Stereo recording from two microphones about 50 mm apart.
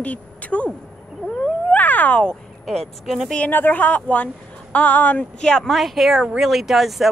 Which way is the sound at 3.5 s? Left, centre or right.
Left.